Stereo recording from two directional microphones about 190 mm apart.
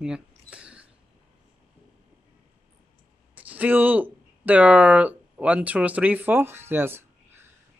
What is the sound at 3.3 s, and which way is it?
Speech, 10° right (ahead or behind).